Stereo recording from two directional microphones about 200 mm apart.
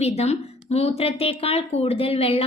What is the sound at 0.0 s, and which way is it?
Speech, 30° left (ahead or behind).